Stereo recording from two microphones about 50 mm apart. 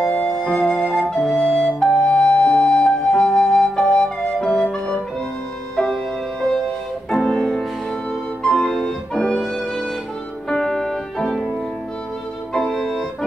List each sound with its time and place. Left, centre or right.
0.1 s flute: centre
2.0 s music: centre
7.1 s music: centre
12.5 s music: centre